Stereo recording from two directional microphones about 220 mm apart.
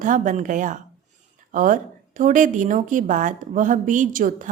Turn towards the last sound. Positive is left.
turn(degrees=-35)  # may be behind; listen again after turning